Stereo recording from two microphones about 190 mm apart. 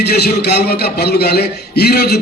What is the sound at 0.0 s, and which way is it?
A man's voice, 60° left (ahead or behind).